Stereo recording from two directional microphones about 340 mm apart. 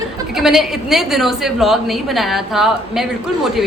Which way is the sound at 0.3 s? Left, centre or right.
Centre.